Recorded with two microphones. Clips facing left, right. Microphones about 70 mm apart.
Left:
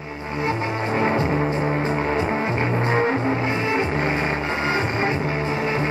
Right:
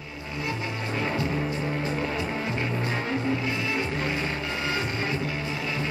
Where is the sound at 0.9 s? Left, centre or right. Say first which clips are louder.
Left 7 dB; left.